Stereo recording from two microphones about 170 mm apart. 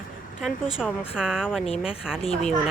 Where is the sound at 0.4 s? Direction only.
5° right (ahead or behind).